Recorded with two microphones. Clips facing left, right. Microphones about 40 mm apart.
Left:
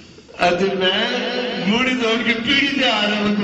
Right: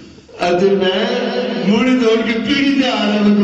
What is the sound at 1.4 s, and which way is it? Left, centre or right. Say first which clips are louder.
Speech: right 4 dB; left.